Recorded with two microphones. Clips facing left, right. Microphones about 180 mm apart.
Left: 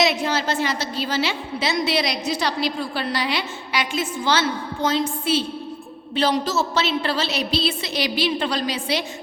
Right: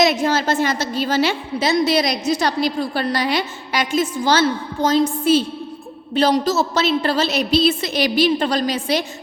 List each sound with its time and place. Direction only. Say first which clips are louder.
0.0 s a woman's voice: right 4 dB; 45° right (ahead or behind)